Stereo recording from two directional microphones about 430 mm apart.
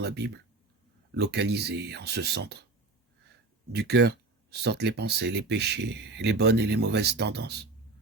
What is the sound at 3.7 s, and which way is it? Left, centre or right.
Speech, right.